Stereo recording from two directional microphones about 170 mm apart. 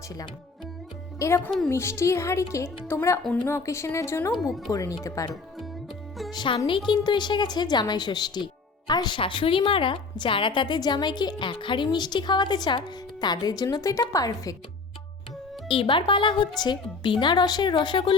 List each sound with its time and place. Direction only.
1.5 s speech: centre (ahead or behind)
1.7 s speech: 15° left (ahead or behind)
4.4 s speech: centre (ahead or behind)
4.7 s a woman's voice: 20° left (ahead or behind)
6.3 s a woman's voice: 25° left (ahead or behind)
15.7 s a woman's voice: 30° left (ahead or behind)